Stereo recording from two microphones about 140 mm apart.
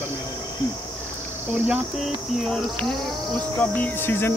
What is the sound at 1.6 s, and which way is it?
Speech, centre (ahead or behind).